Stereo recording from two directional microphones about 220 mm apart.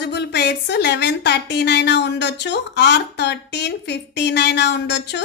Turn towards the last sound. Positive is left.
turn(degrees=50)  # may be behind; listen again after turning